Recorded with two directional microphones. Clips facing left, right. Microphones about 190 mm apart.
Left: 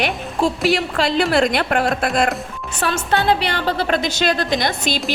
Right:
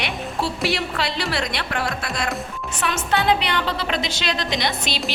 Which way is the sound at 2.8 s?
35° left (ahead or behind).